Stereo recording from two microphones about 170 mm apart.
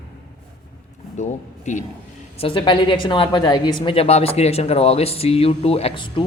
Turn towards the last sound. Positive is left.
turn(degrees=30)  # may be behind; listen again after turning